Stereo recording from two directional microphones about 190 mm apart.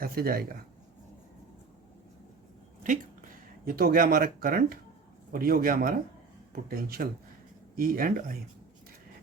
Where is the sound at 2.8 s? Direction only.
45° right (ahead or behind).